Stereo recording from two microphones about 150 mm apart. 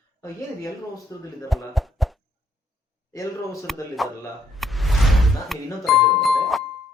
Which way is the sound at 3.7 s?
Centre (ahead or behind).